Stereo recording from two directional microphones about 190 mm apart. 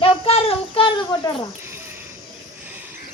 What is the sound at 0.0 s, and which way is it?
Child singing, 30° left (ahead or behind).